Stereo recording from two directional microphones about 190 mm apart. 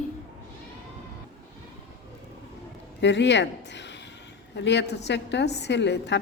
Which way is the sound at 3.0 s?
65° left (ahead or behind).